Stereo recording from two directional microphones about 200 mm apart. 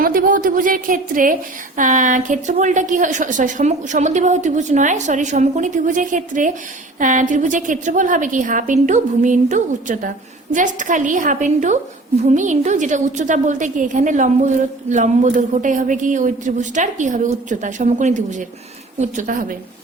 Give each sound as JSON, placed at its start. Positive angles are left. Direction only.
{"t": 0.0, "sound": "a woman's voice", "side_deg": -45}